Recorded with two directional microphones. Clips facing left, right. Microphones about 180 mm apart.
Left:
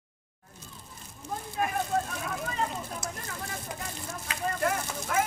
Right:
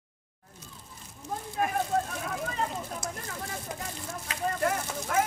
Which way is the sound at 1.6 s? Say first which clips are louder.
Right 1 dB; 45° right (ahead or behind).